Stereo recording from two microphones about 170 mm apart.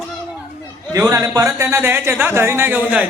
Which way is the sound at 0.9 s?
20° right (ahead or behind).